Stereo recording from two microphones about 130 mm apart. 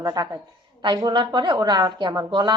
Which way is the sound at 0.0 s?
30° right (ahead or behind).